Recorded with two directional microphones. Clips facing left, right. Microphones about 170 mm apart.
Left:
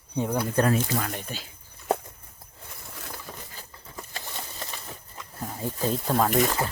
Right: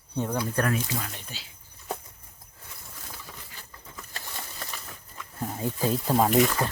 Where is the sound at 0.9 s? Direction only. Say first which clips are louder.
Left 5 dB; 55° left (ahead or behind).